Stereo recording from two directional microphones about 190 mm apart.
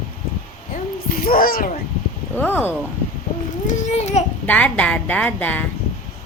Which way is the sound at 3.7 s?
35° left (ahead or behind).